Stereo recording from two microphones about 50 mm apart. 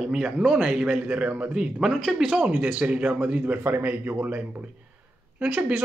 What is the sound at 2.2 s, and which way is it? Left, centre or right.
A man's voice, right.